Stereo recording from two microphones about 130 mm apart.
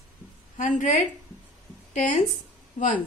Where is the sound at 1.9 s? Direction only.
90° left.